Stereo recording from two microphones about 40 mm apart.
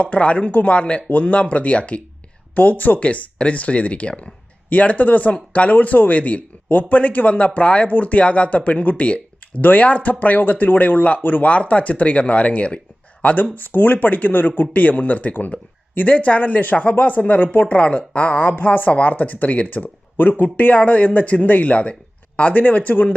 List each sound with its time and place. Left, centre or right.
0.0 s speech: left
2.6 s speech: left
9.6 s speech: left
13.2 s speech: left